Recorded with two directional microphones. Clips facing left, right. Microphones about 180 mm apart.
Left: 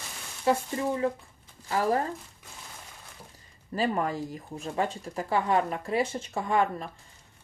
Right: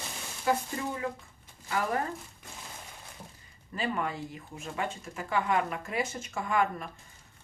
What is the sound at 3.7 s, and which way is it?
Speech, 40° left (ahead or behind).